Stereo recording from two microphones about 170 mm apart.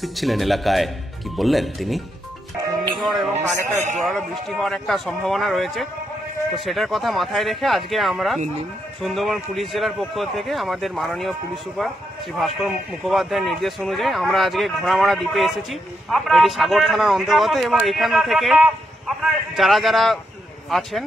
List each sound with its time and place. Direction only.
0.0 s a man's voice: centre (ahead or behind)
3.7 s a man's voice: 45° right (ahead or behind)
4.0 s a man's voice: centre (ahead or behind)